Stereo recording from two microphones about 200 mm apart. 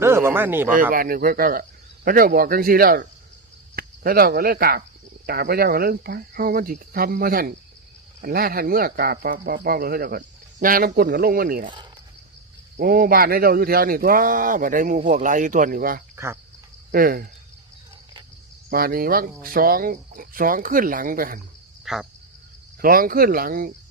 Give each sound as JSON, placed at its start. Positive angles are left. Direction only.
{"t": 0.0, "sound": "a sound", "side_deg": -10}
{"t": 0.9, "sound": "speech", "side_deg": -45}
{"t": 12.7, "sound": "speech", "side_deg": -50}
{"t": 16.1, "sound": "speech", "side_deg": -15}
{"t": 16.9, "sound": "speech", "side_deg": -45}
{"t": 18.7, "sound": "speech", "side_deg": -45}
{"t": 21.9, "sound": "speech", "side_deg": 0}
{"t": 22.8, "sound": "speech", "side_deg": -45}